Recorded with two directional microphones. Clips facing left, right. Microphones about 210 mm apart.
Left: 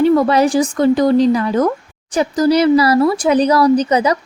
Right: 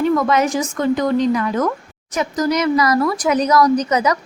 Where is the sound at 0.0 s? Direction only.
35° left (ahead or behind).